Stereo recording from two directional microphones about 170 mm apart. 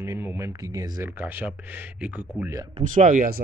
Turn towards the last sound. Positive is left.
turn(degrees=-50)  # may be behind; listen again after turning